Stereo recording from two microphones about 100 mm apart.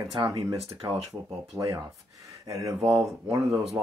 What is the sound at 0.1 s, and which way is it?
Speech, 50° right (ahead or behind).